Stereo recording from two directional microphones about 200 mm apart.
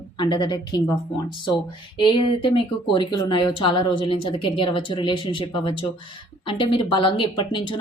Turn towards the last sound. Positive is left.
turn(degrees=25)  # may be behind; listen again after turning